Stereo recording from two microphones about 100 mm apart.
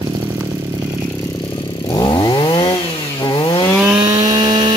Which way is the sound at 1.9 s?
40° left (ahead or behind).